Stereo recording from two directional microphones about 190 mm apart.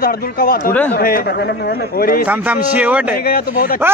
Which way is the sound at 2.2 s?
5° right (ahead or behind).